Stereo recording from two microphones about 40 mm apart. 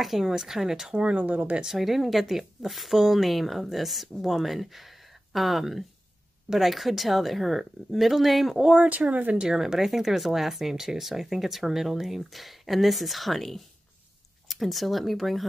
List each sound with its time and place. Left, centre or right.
0.0 s speech: centre
0.9 s speech: right
1.6 s speech: centre
8.8 s speech: right
9.4 s speech: centre